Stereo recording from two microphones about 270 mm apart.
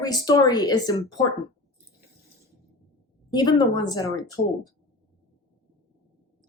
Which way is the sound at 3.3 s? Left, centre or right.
Centre.